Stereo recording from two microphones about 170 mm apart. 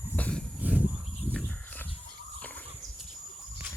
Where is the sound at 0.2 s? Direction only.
5° left (ahead or behind).